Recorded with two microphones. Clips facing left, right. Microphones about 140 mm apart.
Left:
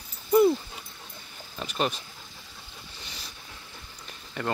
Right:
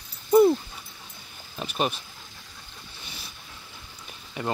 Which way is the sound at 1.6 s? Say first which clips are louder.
Right 1 dB; 15° right (ahead or behind).